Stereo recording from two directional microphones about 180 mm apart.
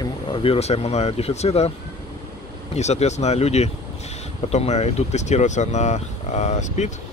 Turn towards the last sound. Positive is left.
turn(degrees=40)  # may be behind; listen again after turning